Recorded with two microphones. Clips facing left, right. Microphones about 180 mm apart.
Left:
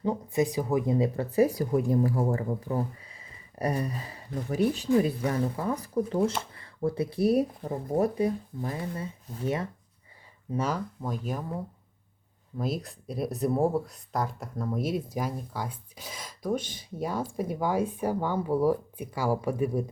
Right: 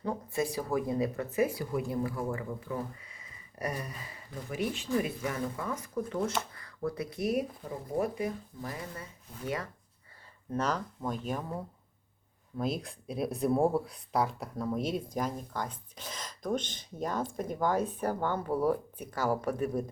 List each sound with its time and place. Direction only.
0.0 s speech: 20° left (ahead or behind); by 8.3 s 40° left (ahead or behind)
8.6 s speech: 30° left (ahead or behind)
10.5 s speech: 10° left (ahead or behind)